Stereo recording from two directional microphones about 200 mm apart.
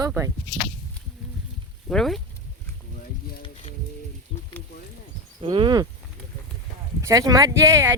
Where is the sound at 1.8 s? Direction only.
Centre (ahead or behind).